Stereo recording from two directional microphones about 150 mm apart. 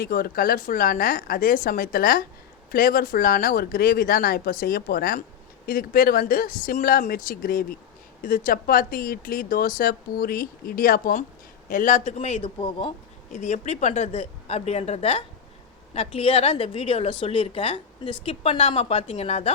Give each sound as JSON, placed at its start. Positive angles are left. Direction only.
{"t": 0.0, "sound": "speech", "side_deg": 75}
{"t": 11.7, "sound": "a woman's voice", "side_deg": 60}
{"t": 13.3, "sound": "a woman's voice", "side_deg": 50}